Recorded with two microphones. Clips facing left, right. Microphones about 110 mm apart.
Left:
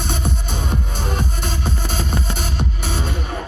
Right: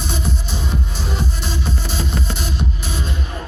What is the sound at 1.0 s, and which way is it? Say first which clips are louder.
Music: left 1 dB; 50° left (ahead or behind).